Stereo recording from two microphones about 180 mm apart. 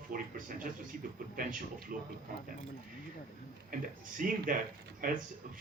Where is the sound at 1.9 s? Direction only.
50° right (ahead or behind).